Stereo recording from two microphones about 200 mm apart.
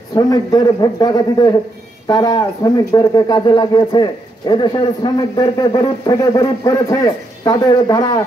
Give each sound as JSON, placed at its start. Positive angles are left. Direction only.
{"t": 0.1, "sound": "speech", "side_deg": 20}